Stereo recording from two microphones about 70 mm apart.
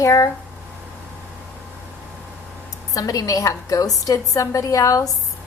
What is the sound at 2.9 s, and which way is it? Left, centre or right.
A woman's voice, left.